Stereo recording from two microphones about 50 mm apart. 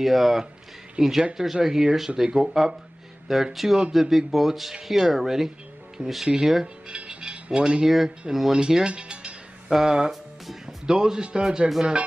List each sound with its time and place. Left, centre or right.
0.0 s speech: centre
6.9 s mechanisms: right
8.3 s speech: centre; by 9.3 s right
9.7 s speech: centre